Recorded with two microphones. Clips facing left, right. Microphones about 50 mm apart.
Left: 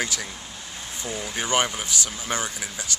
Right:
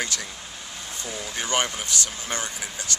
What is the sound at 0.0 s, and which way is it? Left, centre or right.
Speech, centre.